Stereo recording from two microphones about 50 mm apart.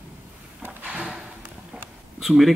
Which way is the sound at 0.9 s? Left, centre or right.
Right.